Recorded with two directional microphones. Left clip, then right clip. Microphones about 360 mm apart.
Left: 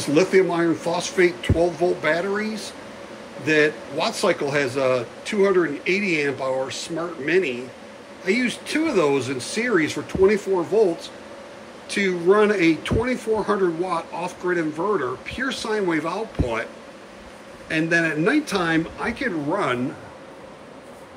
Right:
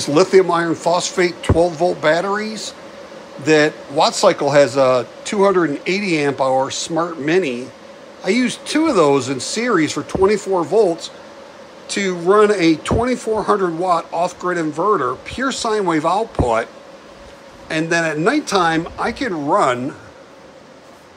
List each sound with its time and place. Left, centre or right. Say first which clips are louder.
0.0 s speech: right 5 dB; centre
11.9 s speech: right 3 dB; centre
17.6 s speech: right 3 dB; centre